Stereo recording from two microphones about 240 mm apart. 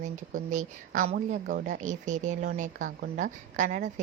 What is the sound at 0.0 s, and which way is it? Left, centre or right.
Speech, right.